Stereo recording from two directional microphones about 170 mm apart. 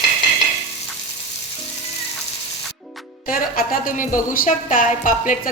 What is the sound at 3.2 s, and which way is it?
A woman's voice, 55° left (ahead or behind).